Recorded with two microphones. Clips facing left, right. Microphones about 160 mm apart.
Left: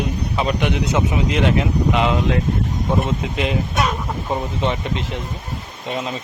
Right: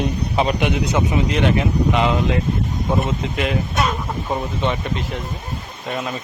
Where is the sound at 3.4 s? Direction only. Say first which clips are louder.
Even; centre (ahead or behind).